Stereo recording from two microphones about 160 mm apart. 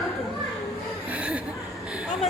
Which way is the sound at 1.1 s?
10° right (ahead or behind).